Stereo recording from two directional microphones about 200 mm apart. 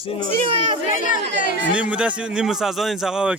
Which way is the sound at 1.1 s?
45° left (ahead or behind).